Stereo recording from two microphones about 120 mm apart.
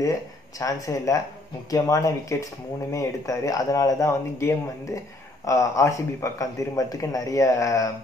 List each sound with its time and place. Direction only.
0.0 s speech: 30° left (ahead or behind)